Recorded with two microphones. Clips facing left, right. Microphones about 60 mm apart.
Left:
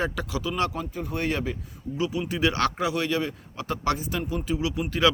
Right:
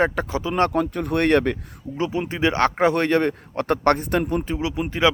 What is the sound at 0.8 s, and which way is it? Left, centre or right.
Speech, right.